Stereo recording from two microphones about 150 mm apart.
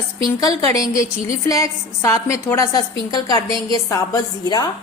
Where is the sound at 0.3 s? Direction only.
25° left (ahead or behind).